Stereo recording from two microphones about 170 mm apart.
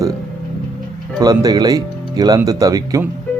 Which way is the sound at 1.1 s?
20° right (ahead or behind).